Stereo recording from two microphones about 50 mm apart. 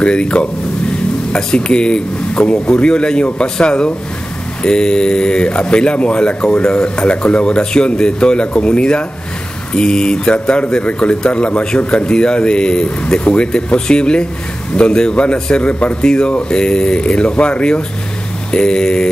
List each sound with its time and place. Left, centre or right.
0.0 s a man's voice: left